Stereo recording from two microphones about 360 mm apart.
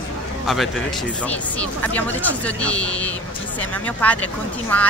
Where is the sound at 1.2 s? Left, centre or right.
Centre.